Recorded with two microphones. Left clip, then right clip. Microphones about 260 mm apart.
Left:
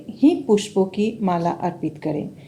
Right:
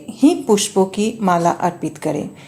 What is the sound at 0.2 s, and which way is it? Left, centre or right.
A woman's voice, right.